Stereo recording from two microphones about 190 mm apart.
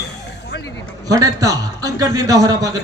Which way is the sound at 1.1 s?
20° right (ahead or behind).